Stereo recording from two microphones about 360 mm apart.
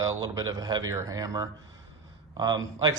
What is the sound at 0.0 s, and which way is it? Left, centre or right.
Speech, centre.